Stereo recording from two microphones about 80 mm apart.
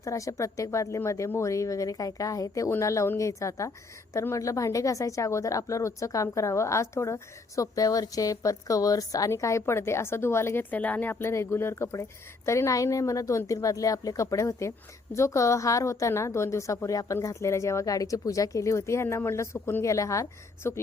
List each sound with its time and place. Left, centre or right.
0.0 s a woman's voice: left